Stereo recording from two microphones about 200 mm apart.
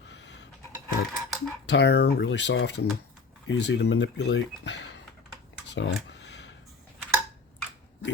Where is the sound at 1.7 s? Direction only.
60° left (ahead or behind).